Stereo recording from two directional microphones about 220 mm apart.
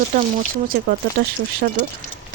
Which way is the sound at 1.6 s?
40° right (ahead or behind).